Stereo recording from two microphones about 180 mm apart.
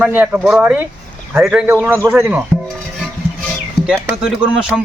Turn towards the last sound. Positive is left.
turn(degrees=-5)  # may be behind; listen again after turning